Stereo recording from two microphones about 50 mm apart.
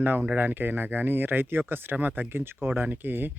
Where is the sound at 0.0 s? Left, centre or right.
Right.